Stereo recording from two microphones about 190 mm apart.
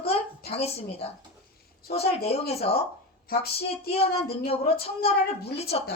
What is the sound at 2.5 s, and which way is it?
Speech, 35° left (ahead or behind).